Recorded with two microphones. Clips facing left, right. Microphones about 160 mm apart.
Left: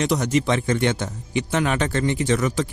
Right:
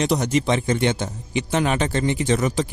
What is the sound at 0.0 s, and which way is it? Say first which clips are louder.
Speech: even; 25° right (ahead or behind).